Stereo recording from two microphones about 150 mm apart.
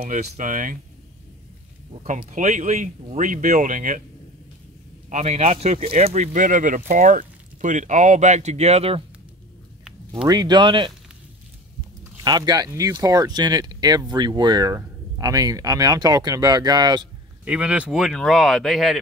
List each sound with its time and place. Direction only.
0.0 s speech: 60° right (ahead or behind)
2.3 s speech: 55° right (ahead or behind)
5.1 s speech: 45° right (ahead or behind)
10.2 s speech: 25° right (ahead or behind)
12.2 s speech: 25° right (ahead or behind)
17.5 s speech: 10° right (ahead or behind)